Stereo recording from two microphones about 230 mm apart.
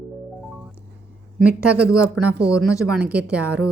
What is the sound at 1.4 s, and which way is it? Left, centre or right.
Speech, centre.